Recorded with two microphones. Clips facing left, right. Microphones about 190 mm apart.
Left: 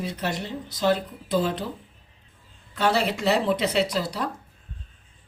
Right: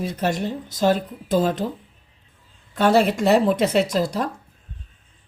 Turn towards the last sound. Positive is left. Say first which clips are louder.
# right 4 dB
turn(degrees=-45)  # may be behind; listen again after turning